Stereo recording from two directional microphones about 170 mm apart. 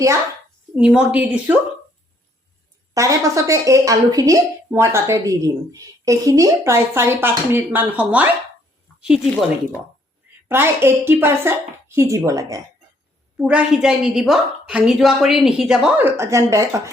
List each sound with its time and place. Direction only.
0.8 s a woman's voice: 10° right (ahead or behind)
2.9 s a woman's voice: 20° right (ahead or behind)
10.5 s a woman's voice: 15° right (ahead or behind)
13.3 s a woman's voice: 5° right (ahead or behind)